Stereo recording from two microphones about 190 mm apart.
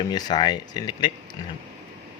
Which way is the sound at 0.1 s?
20° left (ahead or behind).